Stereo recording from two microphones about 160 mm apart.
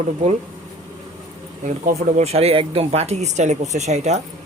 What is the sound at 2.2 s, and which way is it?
Speech, 40° right (ahead or behind).